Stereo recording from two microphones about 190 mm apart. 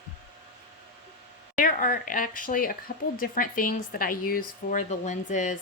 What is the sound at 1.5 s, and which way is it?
Speech, 45° left (ahead or behind).